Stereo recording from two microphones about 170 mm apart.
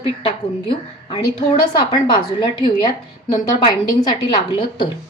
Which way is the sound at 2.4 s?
25° left (ahead or behind).